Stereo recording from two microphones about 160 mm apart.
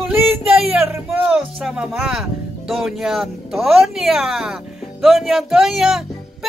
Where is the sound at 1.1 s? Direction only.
5° right (ahead or behind).